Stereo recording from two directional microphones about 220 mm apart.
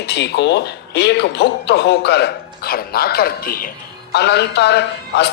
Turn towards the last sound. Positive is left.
turn(degrees=50)  # may be behind; listen again after turning